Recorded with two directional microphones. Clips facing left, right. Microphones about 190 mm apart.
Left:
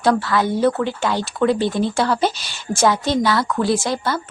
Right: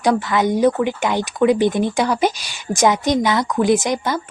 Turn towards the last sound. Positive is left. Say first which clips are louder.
# right 3 dB
turn(degrees=-20)  # may be behind; listen again after turning